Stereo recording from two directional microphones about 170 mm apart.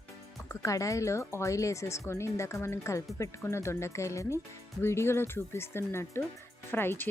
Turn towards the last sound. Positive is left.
turn(degrees=10)  # may be behind; listen again after turning